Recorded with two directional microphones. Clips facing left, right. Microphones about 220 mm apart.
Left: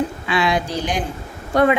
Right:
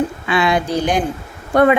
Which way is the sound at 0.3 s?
55° right (ahead or behind).